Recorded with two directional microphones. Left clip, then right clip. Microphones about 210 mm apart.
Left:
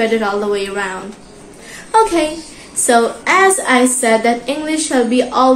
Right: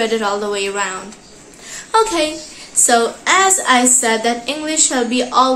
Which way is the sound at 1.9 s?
15° right (ahead or behind).